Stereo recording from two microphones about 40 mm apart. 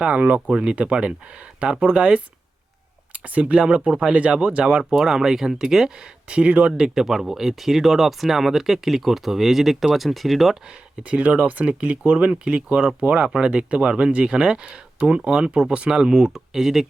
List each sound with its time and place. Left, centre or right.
0.0 s speech: right
4.9 s speech: centre
6.2 s speech: right
6.7 s speech: centre
11.1 s speech: right
12.3 s speech: right; by 16.8 s centre